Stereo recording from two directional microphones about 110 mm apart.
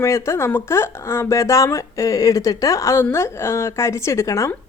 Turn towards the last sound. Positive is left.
turn(degrees=25)  # may be behind; listen again after turning